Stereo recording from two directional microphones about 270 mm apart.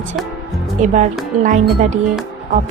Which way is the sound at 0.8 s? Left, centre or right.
Right.